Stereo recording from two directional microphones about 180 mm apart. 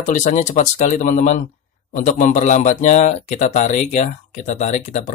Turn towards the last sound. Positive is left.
turn(degrees=40)  # may be behind; listen again after turning